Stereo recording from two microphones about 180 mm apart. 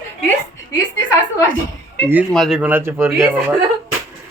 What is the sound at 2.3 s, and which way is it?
A man's voice, centre (ahead or behind).